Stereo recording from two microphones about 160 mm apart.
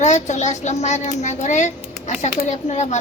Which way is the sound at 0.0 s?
45° left (ahead or behind).